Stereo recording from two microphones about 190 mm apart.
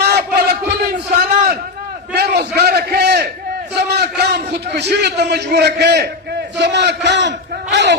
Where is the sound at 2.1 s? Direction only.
60° right (ahead or behind).